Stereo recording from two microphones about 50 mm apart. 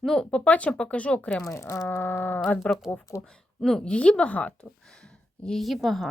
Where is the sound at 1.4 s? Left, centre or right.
Left.